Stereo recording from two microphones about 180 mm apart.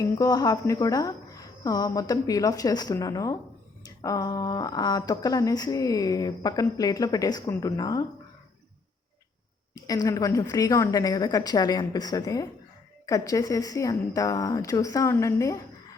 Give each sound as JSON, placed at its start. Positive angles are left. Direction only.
{"t": 0.0, "sound": "speech", "side_deg": 20}
{"t": 9.7, "sound": "speech", "side_deg": 20}